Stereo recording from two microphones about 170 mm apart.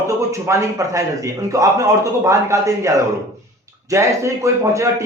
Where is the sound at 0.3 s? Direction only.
15° right (ahead or behind).